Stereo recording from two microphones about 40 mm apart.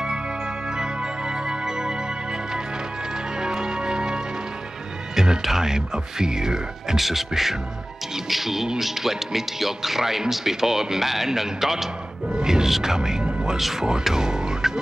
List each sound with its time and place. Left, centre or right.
1.5 s music: centre
3.3 s music: centre
5.4 s speech: centre
7.0 s speech: centre
12.3 s music: centre
12.6 s speech: centre